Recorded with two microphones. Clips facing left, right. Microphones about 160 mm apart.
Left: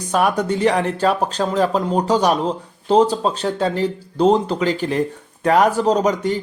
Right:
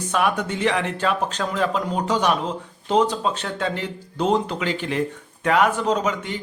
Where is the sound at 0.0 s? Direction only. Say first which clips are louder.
Left 4 dB; 40° left (ahead or behind).